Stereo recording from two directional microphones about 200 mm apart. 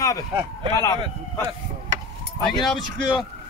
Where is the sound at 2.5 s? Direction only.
Centre (ahead or behind).